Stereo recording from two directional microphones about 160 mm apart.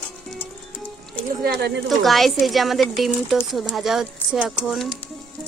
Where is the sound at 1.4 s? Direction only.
90° right.